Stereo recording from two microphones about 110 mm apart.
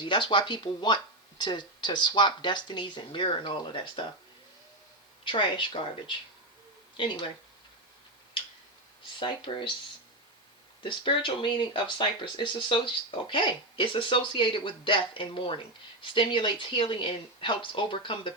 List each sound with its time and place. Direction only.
0.0 s speech: 45° left (ahead or behind)
5.2 s speech: 50° left (ahead or behind)
9.1 s speech: 45° left (ahead or behind)
10.8 s speech: 50° left (ahead or behind)